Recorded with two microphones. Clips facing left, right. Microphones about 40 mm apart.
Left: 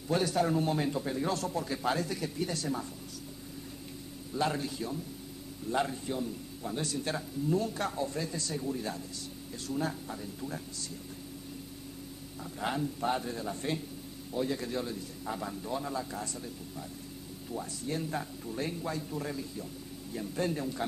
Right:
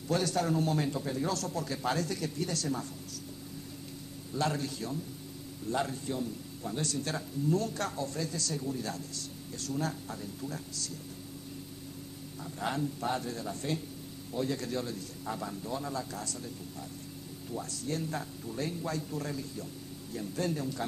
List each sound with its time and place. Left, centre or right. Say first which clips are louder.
0.1 s speech: left 1 dB; centre
4.4 s speech: left 1 dB; centre
12.5 s speech: even; centre
17.5 s speech: even; centre